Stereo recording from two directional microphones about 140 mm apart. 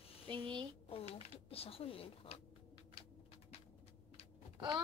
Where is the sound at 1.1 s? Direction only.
45° left (ahead or behind).